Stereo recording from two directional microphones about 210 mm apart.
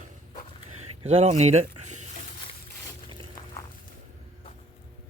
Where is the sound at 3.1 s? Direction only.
25° right (ahead or behind).